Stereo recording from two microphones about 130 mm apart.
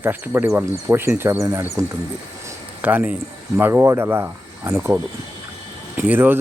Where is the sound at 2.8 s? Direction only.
15° right (ahead or behind).